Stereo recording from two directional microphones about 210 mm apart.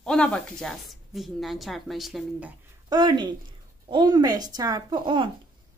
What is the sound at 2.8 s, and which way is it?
A woman's voice, 20° right (ahead or behind).